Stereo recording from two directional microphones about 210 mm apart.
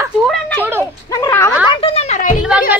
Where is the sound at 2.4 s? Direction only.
5° right (ahead or behind).